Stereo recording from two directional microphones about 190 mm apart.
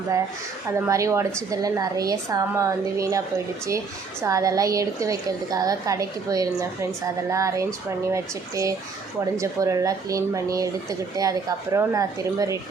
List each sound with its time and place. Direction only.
0.9 s speech: 15° right (ahead or behind)